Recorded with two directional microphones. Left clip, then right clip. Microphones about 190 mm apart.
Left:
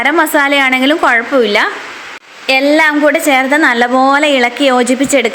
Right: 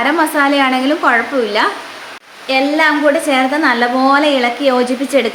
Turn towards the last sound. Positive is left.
turn(degrees=40)  # may be behind; listen again after turning